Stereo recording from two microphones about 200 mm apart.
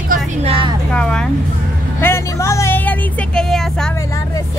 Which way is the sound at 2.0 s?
10° left (ahead or behind).